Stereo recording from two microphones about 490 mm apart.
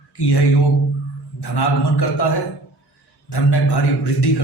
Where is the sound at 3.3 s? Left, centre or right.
Left.